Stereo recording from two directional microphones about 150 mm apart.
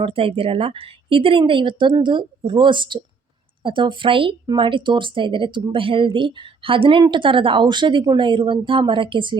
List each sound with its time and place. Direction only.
0.0 s speech: 35° right (ahead or behind)